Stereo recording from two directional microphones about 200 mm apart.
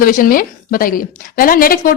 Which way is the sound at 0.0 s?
45° left (ahead or behind).